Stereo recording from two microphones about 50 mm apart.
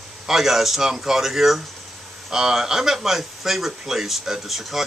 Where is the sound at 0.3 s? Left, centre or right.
Centre.